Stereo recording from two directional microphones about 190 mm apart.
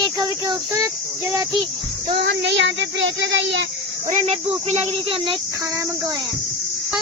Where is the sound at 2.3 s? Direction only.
65° right (ahead or behind).